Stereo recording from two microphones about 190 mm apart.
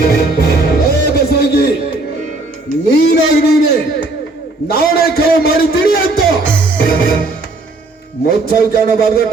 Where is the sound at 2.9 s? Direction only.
55° left (ahead or behind).